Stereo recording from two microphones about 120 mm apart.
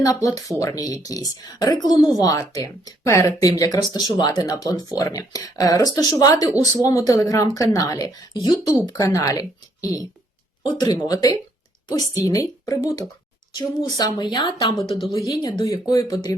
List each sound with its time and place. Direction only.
0.0 s a woman's voice: 30° left (ahead or behind)
13.5 s a woman's voice: 40° left (ahead or behind)